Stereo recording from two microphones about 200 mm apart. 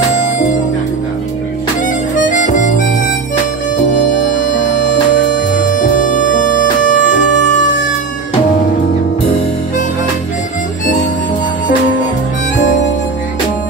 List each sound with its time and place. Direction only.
2.2 s harmonica: 40° left (ahead or behind)
3.9 s music: 40° left (ahead or behind)